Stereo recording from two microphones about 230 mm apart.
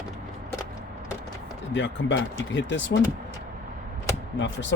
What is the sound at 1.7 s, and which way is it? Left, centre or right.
Speech, left.